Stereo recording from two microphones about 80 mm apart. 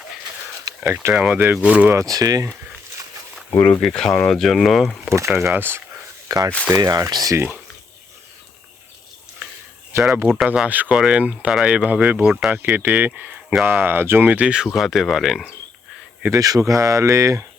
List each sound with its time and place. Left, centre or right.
0.8 s speech: centre
1.9 s speech: right
3.5 s speech: left
3.8 s speech: centre
5.0 s speech: right
6.2 s speech: right
7.3 s speech: right
9.9 s speech: right
10.4 s speech: centre
10.7 s speech: right
10.9 s speech: centre; by 14.3 s right
14.3 s speech: centre
16.3 s speech: right